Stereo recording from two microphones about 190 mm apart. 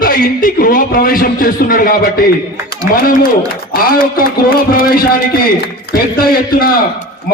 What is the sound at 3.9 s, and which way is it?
A man's voice, 50° left (ahead or behind).